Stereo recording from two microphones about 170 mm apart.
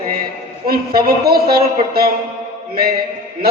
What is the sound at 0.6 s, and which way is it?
A woman's voice, 60° right (ahead or behind).